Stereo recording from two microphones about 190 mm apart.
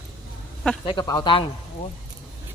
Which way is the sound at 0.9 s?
25° left (ahead or behind).